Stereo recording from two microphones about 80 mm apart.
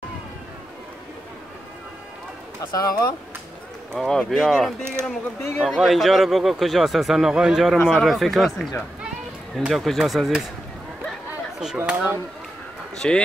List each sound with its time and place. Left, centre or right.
2.7 s speech: left
3.9 s speech: centre
5.0 s speech: right
5.6 s speech: centre
9.6 s speech: centre
11.6 s speech: centre
13.0 s speech: centre